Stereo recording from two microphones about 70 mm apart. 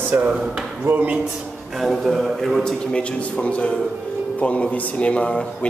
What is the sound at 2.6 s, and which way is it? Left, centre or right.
A man's voice, centre.